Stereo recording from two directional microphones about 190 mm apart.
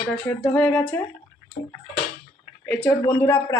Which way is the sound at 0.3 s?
10° left (ahead or behind).